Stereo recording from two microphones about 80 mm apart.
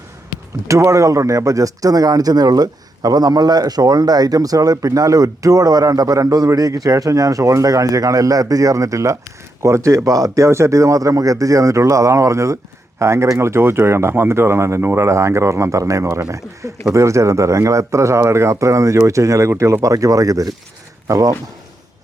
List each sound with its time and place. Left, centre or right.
0.7 s speech: right